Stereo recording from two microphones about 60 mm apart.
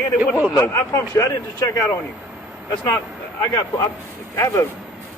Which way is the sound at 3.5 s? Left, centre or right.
Left.